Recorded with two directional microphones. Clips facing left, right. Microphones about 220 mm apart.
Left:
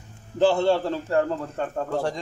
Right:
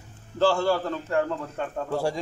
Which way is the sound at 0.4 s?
20° left (ahead or behind).